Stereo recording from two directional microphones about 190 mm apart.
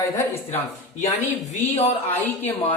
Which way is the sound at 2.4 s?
30° left (ahead or behind).